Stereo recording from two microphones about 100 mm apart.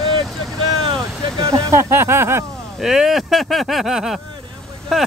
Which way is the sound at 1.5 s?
25° right (ahead or behind).